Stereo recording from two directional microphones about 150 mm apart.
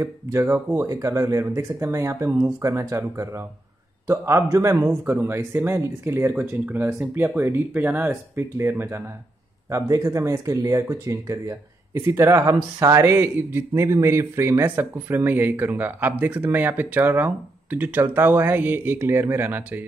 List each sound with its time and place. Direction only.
0.0 s speech: 20° right (ahead or behind)